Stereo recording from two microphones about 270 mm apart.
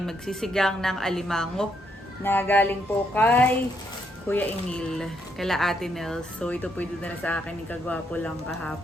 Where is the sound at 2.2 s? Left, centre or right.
Centre.